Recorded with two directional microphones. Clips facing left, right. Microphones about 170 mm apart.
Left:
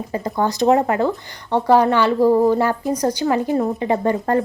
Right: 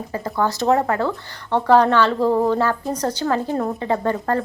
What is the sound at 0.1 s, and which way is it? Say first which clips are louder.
A woman's voice: left 1 dB; 20° left (ahead or behind).